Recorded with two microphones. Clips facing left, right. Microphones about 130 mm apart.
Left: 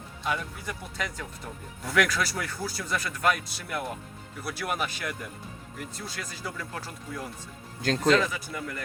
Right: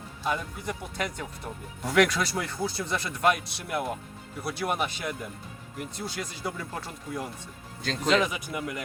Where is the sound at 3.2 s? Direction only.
5° right (ahead or behind).